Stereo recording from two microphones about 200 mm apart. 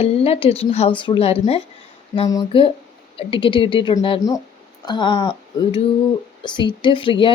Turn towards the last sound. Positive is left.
turn(degrees=25)  # may be behind; listen again after turning